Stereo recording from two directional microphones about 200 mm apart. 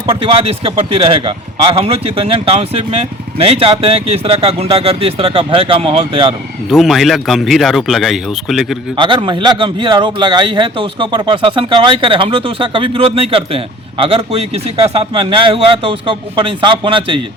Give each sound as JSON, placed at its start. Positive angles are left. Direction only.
{"t": 0.0, "sound": "a man's voice", "side_deg": -25}
{"t": 6.7, "sound": "a man's voice", "side_deg": 0}
{"t": 9.0, "sound": "a man's voice", "side_deg": -25}